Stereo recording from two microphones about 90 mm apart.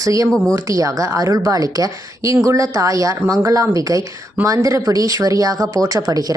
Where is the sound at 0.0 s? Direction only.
40° right (ahead or behind).